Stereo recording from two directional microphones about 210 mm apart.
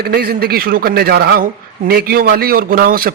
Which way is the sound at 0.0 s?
45° right (ahead or behind).